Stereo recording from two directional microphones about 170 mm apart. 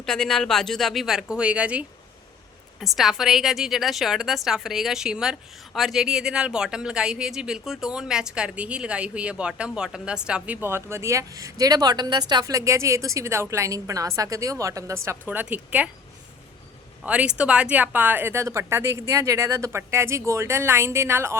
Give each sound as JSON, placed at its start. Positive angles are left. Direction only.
{"t": 0.0, "sound": "a woman's voice", "side_deg": 5}
{"t": 2.8, "sound": "a woman's voice", "side_deg": 0}
{"t": 17.0, "sound": "a woman's voice", "side_deg": -5}